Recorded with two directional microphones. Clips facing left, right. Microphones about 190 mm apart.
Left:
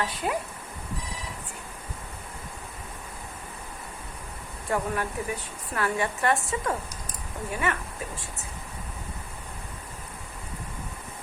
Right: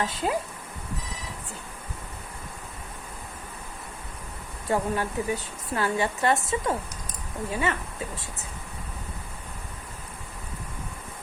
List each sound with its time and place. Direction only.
0.0 s a woman's voice: 25° right (ahead or behind)
4.7 s a woman's voice: 25° right (ahead or behind)